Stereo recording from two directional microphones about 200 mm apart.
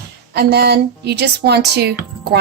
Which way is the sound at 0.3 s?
55° right (ahead or behind).